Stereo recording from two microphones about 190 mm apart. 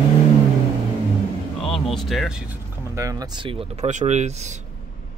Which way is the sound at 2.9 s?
20° right (ahead or behind).